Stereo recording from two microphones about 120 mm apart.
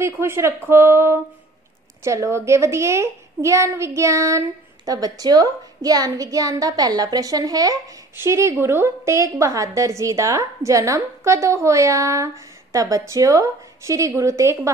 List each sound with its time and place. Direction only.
0.0 s a woman's voice: 20° right (ahead or behind)